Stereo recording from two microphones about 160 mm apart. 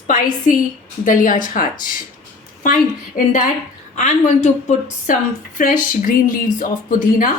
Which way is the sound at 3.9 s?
50° left (ahead or behind).